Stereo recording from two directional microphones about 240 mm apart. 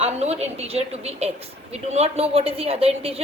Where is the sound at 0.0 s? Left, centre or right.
Right.